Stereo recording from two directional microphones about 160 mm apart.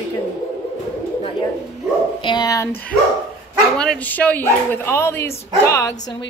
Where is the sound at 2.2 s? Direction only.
25° left (ahead or behind).